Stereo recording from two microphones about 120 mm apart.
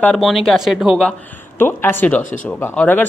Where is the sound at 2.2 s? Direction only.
90° left.